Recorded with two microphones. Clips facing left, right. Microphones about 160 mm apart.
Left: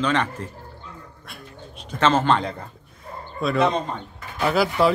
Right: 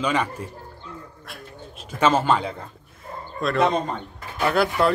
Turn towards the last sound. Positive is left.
turn(degrees=0)  # may be behind; listen again after turning